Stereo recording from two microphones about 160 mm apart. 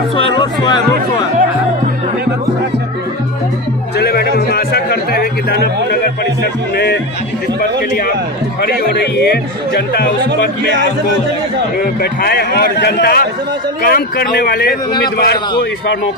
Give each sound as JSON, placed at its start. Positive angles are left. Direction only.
{"t": 0.2, "sound": "speech", "side_deg": 25}
{"t": 4.0, "sound": "a sound", "side_deg": 70}
{"t": 9.1, "sound": "speech", "side_deg": 90}
{"t": 10.2, "sound": "a man's voice", "side_deg": -90}
{"t": 12.0, "sound": "a man's voice", "side_deg": 75}
{"t": 13.8, "sound": "a man's voice", "side_deg": 70}